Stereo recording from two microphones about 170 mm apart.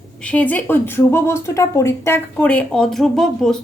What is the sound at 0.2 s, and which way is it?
Speech, 10° left (ahead or behind).